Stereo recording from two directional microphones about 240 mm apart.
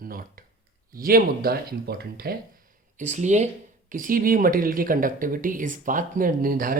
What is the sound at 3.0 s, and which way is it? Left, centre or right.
Speech, right.